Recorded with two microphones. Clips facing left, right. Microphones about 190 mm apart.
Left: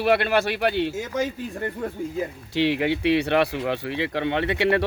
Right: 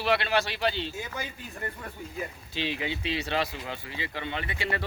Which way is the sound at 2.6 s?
70° left (ahead or behind).